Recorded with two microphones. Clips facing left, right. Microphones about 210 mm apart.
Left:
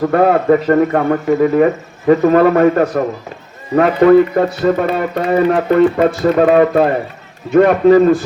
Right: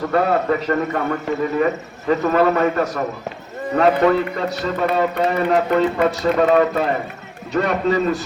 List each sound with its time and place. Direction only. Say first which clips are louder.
0.1 s speech: left 6 dB; 50° left (ahead or behind)